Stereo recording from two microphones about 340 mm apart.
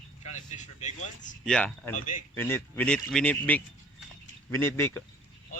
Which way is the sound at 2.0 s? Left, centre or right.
Left.